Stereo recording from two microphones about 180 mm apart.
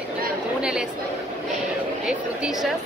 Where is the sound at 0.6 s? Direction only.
5° right (ahead or behind).